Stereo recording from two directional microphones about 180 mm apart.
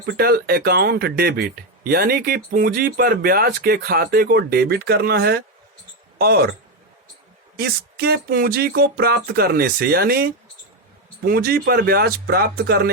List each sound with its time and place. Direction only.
0.0 s speech: 60° right (ahead or behind)
7.6 s speech: 60° right (ahead or behind)